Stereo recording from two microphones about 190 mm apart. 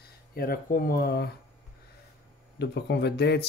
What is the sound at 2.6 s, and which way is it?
Speech, 60° left (ahead or behind).